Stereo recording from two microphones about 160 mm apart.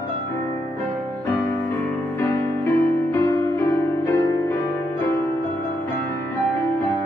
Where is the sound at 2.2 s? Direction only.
15° left (ahead or behind).